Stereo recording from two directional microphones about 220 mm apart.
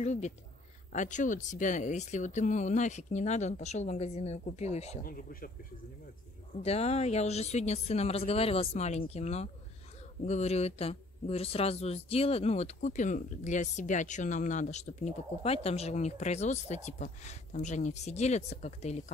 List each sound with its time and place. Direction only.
0.0 s speech: 30° left (ahead or behind)
5.0 s speech: 40° left (ahead or behind)
6.6 s speech: 30° left (ahead or behind)